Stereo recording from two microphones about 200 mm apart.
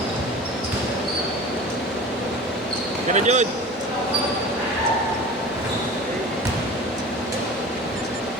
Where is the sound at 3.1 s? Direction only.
35° right (ahead or behind).